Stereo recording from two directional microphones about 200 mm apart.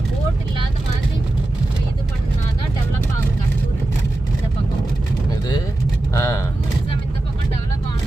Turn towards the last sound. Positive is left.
turn(degrees=15)  # may be behind; listen again after turning